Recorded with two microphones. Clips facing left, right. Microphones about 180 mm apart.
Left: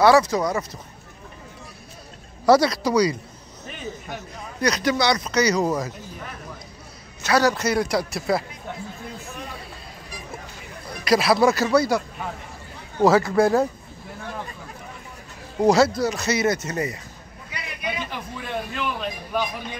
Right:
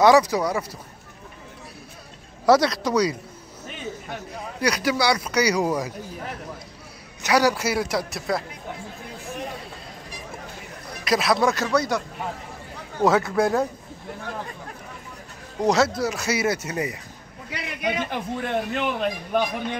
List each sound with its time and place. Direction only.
0.0 s speech: 15° right (ahead or behind)
2.4 s speech: centre (ahead or behind)
4.6 s speech: 10° right (ahead or behind)
7.2 s speech: 15° right (ahead or behind)
11.1 s speech: centre (ahead or behind)
13.0 s speech: centre (ahead or behind)
15.6 s speech: centre (ahead or behind)
17.5 s a man's voice: 55° right (ahead or behind)